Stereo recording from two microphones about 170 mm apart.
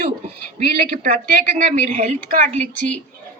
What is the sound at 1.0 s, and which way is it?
Speech, 50° right (ahead or behind).